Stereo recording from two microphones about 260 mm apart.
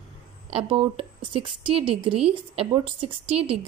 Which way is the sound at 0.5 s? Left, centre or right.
Right.